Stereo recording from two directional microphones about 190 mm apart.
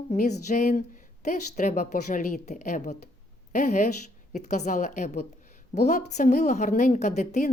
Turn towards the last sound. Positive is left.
turn(degrees=40)  # may be behind; listen again after turning